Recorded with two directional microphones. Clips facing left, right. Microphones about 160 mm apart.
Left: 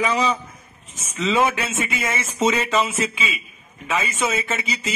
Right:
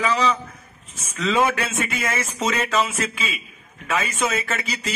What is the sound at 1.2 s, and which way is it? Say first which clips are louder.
Speech: even; 5° left (ahead or behind).